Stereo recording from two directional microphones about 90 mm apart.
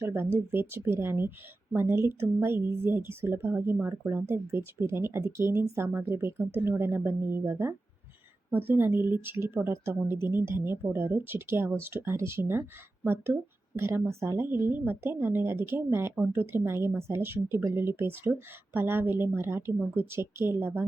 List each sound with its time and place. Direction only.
0.0 s speech: 25° right (ahead or behind)
13.7 s speech: 25° right (ahead or behind)